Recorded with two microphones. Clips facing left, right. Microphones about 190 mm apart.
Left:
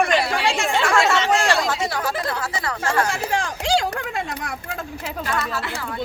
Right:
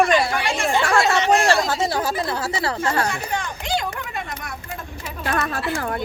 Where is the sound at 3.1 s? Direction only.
90° left.